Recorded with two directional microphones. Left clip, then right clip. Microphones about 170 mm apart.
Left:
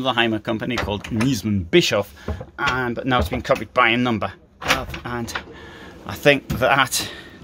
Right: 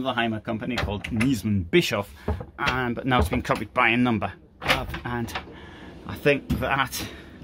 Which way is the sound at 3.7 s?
15° left (ahead or behind).